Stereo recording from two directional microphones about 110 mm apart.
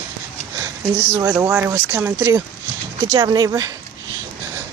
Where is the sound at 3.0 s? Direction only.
35° right (ahead or behind).